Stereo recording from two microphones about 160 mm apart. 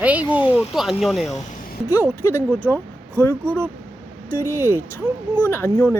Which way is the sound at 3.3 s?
10° left (ahead or behind).